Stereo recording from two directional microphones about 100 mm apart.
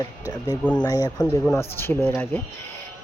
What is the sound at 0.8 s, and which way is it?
Speech, 40° left (ahead or behind).